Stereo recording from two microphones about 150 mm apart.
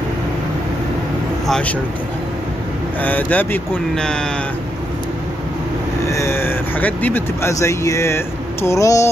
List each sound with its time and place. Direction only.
1.5 s speech: 10° left (ahead or behind)
3.0 s speech: 10° left (ahead or behind)
6.0 s speech: 20° left (ahead or behind)